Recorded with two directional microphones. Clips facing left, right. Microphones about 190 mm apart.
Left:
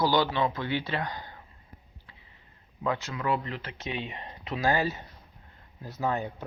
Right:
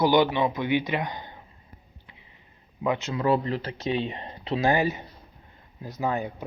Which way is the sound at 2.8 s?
20° right (ahead or behind).